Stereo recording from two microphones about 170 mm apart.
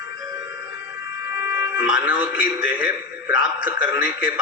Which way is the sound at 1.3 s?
10° right (ahead or behind).